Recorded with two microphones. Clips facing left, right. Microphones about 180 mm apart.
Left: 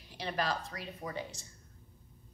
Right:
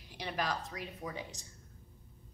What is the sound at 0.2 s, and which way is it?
Speech, 15° right (ahead or behind).